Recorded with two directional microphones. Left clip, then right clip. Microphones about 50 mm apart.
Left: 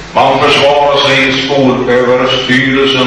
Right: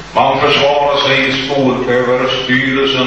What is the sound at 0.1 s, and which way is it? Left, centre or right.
A man's voice, centre.